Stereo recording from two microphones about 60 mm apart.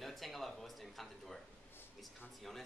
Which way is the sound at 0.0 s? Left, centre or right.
Centre.